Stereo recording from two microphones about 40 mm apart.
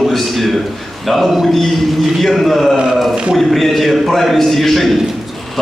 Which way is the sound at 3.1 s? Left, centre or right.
Centre.